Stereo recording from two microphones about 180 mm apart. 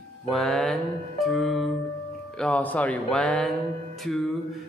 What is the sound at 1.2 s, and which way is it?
Music, centre (ahead or behind).